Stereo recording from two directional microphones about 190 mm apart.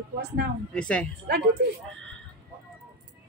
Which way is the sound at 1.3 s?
60° right (ahead or behind).